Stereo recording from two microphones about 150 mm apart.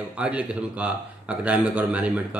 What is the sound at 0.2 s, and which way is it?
Speech, 10° right (ahead or behind).